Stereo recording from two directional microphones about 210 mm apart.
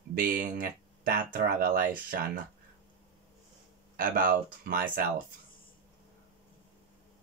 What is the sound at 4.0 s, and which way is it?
Speech, 45° right (ahead or behind).